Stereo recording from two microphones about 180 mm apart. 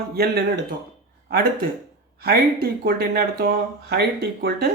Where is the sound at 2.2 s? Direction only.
55° right (ahead or behind).